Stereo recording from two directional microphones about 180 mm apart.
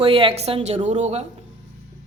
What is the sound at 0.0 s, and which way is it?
Speech, 30° right (ahead or behind).